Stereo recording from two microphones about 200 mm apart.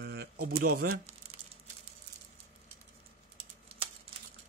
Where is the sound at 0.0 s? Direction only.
55° right (ahead or behind).